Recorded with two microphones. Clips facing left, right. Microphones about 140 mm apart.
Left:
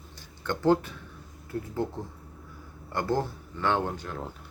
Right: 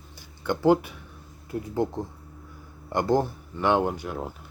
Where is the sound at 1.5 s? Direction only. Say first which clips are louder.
Right 4 dB; 15° right (ahead or behind).